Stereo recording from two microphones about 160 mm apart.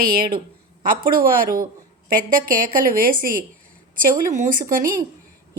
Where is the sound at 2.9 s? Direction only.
60° right (ahead or behind).